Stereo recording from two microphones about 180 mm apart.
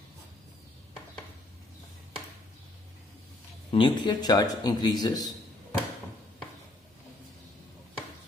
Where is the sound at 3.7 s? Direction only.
25° left (ahead or behind).